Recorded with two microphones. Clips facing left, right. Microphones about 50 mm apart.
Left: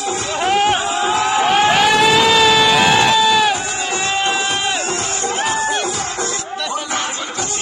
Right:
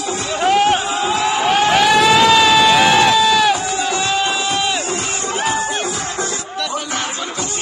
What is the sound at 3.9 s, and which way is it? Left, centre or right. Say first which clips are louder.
Music: even; left.